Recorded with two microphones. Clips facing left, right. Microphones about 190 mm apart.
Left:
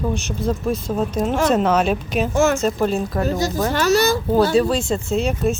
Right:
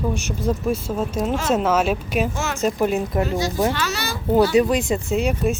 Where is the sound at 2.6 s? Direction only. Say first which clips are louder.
Left 1 dB; 15° right (ahead or behind).